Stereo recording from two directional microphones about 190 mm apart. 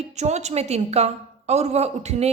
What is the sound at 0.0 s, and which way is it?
A woman's voice, 35° right (ahead or behind).